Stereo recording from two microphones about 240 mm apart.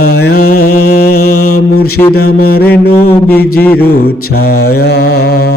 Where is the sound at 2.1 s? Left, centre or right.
Left.